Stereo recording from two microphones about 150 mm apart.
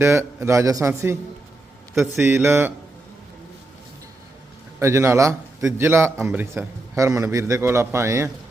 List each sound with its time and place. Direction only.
0.0 s a man's voice: 20° right (ahead or behind)
4.8 s a man's voice: 20° right (ahead or behind)